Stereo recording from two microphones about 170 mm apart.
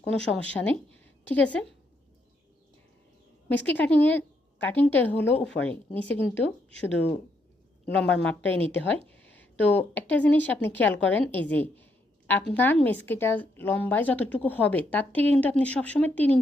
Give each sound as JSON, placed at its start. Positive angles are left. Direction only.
{"t": 0.0, "sound": "a woman's voice", "side_deg": 10}
{"t": 3.7, "sound": "a woman's voice", "side_deg": 10}